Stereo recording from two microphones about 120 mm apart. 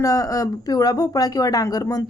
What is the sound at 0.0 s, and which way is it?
Speech, 30° left (ahead or behind).